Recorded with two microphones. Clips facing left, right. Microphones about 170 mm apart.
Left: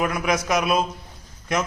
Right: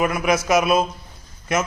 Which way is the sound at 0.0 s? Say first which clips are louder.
Right 3 dB; 5° right (ahead or behind).